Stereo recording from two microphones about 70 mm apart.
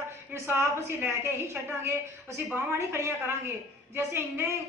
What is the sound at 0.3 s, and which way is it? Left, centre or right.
A woman's voice, right.